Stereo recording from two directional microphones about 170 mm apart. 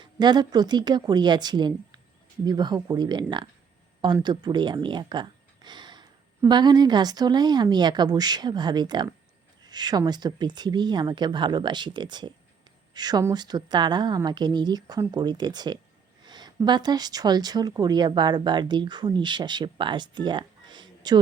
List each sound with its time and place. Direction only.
0.0 s speech: 25° right (ahead or behind)